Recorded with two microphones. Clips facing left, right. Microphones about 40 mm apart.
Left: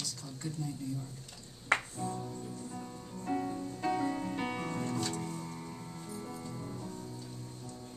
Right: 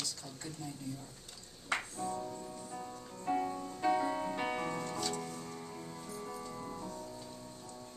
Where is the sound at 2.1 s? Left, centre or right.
Centre.